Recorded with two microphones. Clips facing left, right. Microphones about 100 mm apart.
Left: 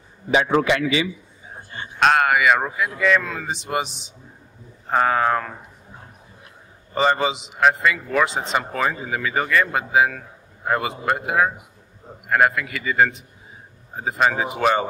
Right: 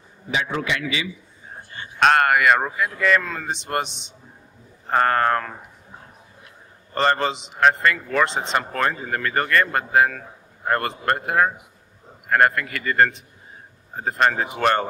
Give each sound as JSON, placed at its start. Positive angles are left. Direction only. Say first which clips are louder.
{"t": 0.5, "sound": "a man's voice", "louder": "left 7 dB", "side_deg": 40}
{"t": 2.0, "sound": "a man's voice", "louder": "even", "side_deg": 0}
{"t": 6.9, "sound": "a man's voice", "louder": "left 1 dB", "side_deg": 5}